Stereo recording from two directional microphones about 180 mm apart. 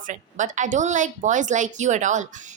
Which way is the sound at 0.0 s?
45° right (ahead or behind).